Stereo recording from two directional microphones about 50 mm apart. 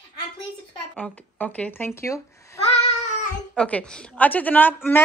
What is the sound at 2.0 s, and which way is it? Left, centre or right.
Speech, left.